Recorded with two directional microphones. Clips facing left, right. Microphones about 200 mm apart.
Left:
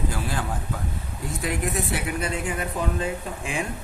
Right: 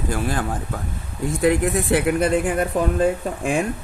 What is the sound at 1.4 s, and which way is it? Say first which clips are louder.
Speech: right 9 dB; 60° right (ahead or behind).